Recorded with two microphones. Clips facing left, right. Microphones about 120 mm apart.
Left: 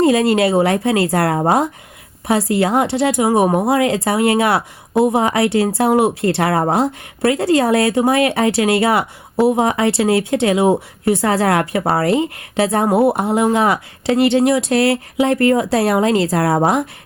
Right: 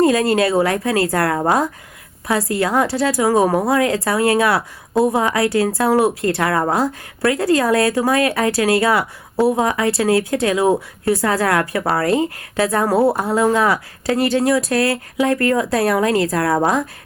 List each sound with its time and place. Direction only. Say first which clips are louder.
0.0 s speech: left 1 dB; 25° left (ahead or behind)